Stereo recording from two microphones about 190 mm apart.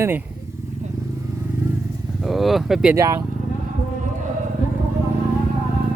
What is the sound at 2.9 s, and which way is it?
Speech, 15° right (ahead or behind).